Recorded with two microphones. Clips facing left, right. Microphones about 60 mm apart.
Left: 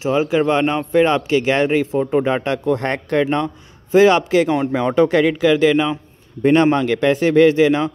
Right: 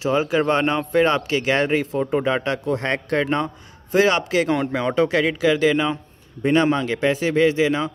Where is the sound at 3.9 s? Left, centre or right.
Left.